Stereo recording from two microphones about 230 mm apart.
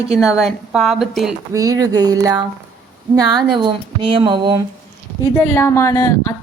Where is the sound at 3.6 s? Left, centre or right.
Right.